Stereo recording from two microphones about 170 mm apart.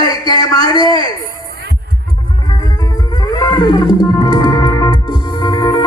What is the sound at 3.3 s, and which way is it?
Music, 25° left (ahead or behind).